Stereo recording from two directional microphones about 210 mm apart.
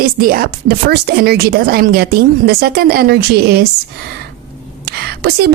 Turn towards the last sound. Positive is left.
turn(degrees=-50)  # may be behind; listen again after turning